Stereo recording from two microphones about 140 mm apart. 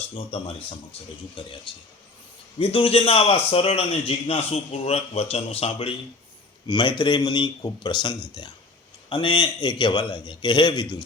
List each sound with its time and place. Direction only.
1.4 s a man's voice: 40° left (ahead or behind)
6.7 s a man's voice: 35° left (ahead or behind)